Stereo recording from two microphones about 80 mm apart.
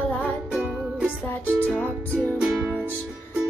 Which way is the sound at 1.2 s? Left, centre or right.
Left.